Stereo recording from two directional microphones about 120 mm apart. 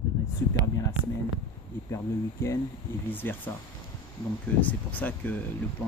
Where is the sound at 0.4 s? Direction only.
25° left (ahead or behind).